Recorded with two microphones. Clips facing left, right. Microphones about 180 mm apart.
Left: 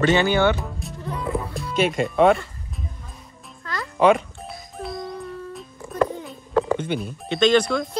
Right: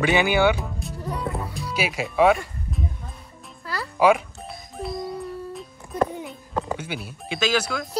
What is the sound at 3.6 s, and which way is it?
Music, 5° right (ahead or behind).